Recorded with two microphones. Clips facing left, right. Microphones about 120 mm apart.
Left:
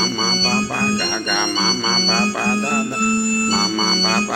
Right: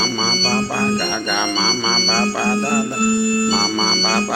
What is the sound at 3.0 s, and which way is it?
Organ, 45° left (ahead or behind).